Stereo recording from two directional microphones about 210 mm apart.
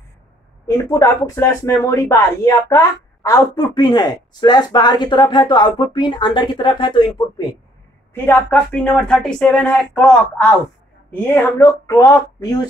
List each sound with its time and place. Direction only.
0.7 s speech: 15° left (ahead or behind)
8.1 s speech: 10° left (ahead or behind)